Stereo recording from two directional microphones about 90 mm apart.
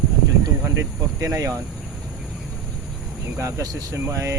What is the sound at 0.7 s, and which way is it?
Speech, 35° right (ahead or behind).